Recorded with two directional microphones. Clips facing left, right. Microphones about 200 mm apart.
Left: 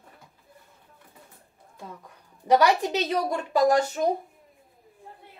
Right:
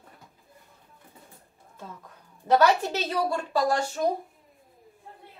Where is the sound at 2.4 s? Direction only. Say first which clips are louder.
Left 1 dB; 15° left (ahead or behind).